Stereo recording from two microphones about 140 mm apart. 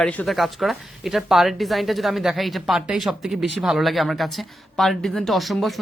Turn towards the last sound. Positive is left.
turn(degrees=0)  # may be behind; listen again after turning